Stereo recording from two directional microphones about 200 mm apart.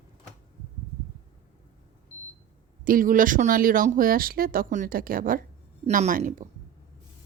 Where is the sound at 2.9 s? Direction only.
45° right (ahead or behind).